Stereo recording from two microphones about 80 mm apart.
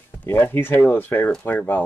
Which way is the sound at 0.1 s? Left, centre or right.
Left.